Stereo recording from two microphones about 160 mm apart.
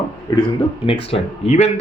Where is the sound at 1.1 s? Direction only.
45° left (ahead or behind).